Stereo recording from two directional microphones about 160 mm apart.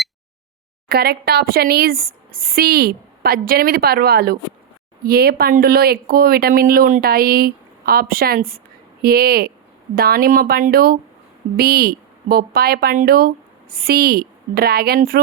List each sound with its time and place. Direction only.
0.9 s speech: 75° right (ahead or behind)